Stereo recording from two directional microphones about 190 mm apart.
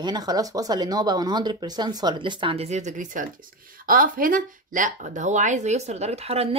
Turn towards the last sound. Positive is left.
turn(degrees=-35)  # may be behind; listen again after turning